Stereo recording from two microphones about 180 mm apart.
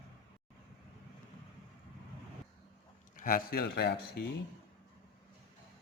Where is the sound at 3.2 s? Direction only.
50° left (ahead or behind).